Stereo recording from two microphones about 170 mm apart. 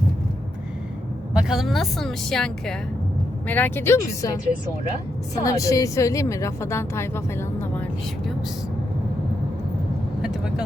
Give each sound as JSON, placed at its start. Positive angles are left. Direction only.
{"t": 1.3, "sound": "a woman's voice", "side_deg": -5}
{"t": 5.5, "sound": "a woman's voice", "side_deg": 20}
{"t": 10.2, "sound": "vehicle", "side_deg": -5}